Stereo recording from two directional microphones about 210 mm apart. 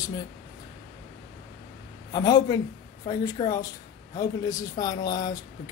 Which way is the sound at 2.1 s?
20° left (ahead or behind).